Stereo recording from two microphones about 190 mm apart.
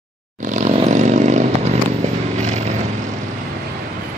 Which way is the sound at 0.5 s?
35° right (ahead or behind).